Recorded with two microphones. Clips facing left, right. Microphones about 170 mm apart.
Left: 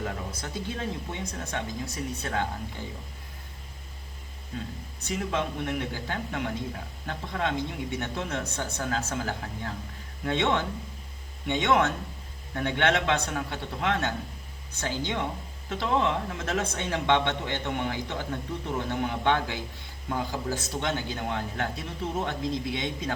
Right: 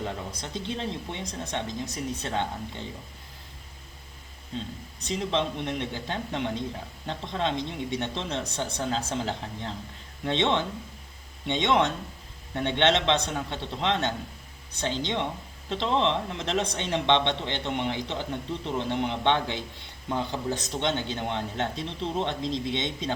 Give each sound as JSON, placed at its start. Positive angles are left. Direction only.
{"t": 0.0, "sound": "speech", "side_deg": -20}
{"t": 4.5, "sound": "speech", "side_deg": -20}